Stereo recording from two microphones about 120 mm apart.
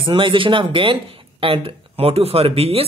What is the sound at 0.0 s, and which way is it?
Speech, 45° right (ahead or behind).